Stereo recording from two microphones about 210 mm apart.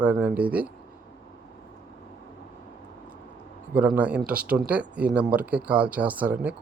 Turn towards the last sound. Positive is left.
turn(degrees=-10)  # may be behind; listen again after turning